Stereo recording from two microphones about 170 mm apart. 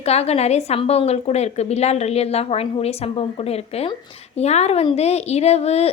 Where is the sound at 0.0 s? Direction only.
40° left (ahead or behind).